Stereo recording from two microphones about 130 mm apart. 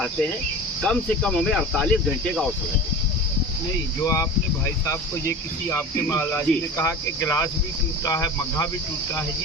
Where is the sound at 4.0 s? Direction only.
25° left (ahead or behind).